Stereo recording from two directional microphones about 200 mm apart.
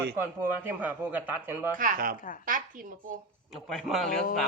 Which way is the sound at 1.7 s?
45° right (ahead or behind).